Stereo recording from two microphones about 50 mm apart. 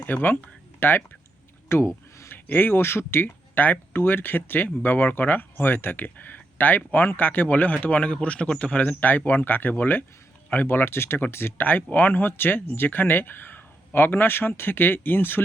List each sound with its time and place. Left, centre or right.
0.0 s speech: left
1.7 s speech: left
2.3 s speech: left
8.9 s speech: left